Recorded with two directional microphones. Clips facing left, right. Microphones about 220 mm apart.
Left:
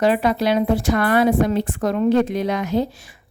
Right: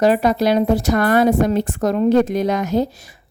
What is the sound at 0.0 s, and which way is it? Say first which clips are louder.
Speech: right 3 dB; 40° right (ahead or behind).